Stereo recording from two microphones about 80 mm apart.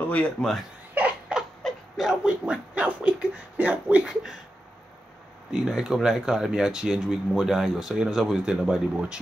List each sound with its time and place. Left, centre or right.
0.1 s speech: centre
0.9 s a sound: centre
1.6 s a sound: centre
2.0 s speech: centre
4.0 s speech: centre
5.5 s speech: centre